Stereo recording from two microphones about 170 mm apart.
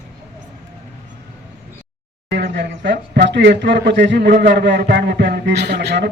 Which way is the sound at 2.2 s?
90° right.